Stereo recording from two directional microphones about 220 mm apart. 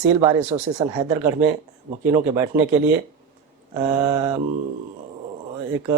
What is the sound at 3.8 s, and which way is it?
Speech, 15° right (ahead or behind).